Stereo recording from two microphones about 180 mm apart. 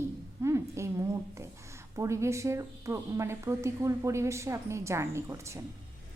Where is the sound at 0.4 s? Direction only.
15° right (ahead or behind).